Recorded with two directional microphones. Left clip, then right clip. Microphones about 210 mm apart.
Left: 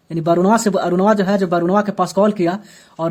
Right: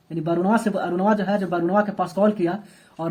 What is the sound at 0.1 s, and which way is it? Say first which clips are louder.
Speech: left 7 dB; 55° left (ahead or behind).